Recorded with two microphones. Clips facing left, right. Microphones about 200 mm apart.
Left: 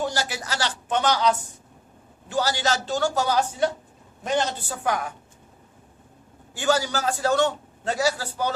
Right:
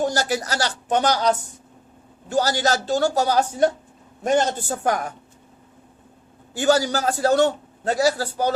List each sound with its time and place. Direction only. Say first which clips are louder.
0.0 s a man's voice: right 5 dB; 45° right (ahead or behind)
6.5 s a man's voice: right 4 dB; 40° right (ahead or behind)